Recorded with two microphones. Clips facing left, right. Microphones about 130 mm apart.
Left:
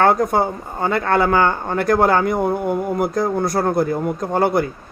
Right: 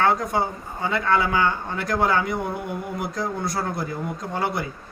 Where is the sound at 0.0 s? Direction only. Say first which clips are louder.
Left 6 dB; 50° left (ahead or behind).